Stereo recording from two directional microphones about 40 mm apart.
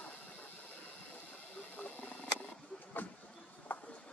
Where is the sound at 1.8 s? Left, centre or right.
Left.